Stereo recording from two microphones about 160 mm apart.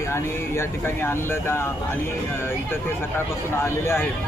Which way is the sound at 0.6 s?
15° left (ahead or behind).